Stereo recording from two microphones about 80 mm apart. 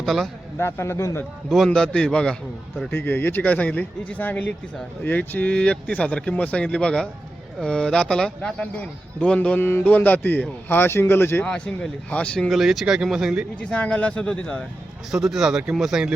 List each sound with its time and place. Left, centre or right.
0.0 s a man's voice: centre
0.6 s a man's voice: left
1.5 s speech: centre
2.9 s speech: left
9.6 s a man's voice: left
11.4 s speech: centre
12.5 s speech: centre
13.6 s speech: centre
15.1 s speech: centre